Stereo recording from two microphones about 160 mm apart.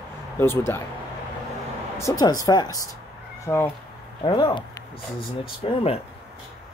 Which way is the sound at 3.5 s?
10° left (ahead or behind).